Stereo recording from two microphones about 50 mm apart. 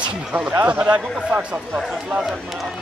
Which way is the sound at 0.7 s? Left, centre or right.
Right.